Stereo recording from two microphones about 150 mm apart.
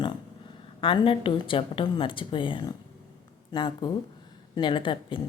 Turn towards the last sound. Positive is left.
turn(degrees=35)  # may be behind; listen again after turning